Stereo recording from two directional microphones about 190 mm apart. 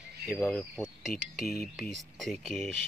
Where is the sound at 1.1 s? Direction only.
50° left (ahead or behind).